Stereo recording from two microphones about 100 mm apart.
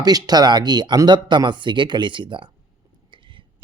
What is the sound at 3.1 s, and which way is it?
Whispering, 55° right (ahead or behind).